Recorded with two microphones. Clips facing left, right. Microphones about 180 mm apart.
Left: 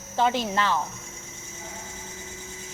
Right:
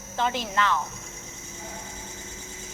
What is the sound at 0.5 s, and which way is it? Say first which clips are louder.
Speech: even; 30° left (ahead or behind).